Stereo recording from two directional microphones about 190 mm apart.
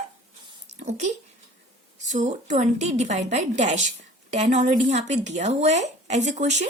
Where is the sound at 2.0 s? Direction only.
40° right (ahead or behind).